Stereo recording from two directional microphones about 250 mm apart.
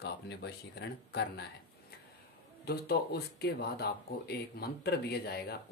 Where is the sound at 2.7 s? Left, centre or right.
Left.